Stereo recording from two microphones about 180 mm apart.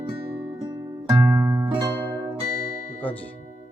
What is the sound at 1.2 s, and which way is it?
Music, 15° right (ahead or behind).